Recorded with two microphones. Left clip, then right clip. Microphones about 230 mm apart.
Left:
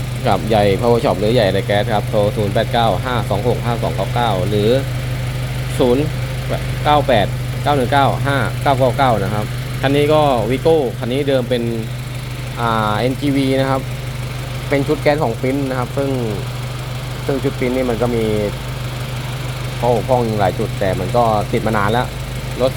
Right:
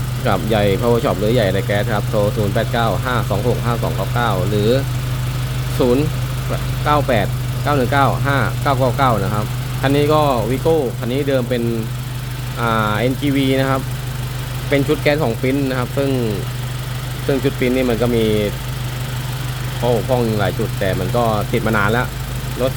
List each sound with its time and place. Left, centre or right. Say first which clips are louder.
0.3 s speech: left 2 dB; centre
5.8 s speech: left 1 dB; centre
17.6 s speech: even; centre
19.8 s speech: left 2 dB; centre